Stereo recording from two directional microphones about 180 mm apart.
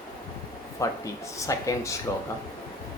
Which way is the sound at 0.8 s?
15° left (ahead or behind).